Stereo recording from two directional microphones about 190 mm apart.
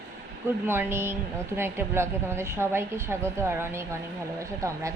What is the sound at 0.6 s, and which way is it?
A woman's voice, 10° right (ahead or behind).